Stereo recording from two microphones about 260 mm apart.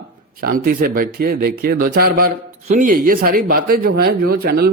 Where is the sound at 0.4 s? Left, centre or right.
Right.